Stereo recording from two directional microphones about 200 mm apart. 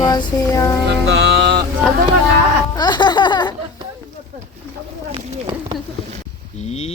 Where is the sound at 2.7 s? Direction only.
20° left (ahead or behind).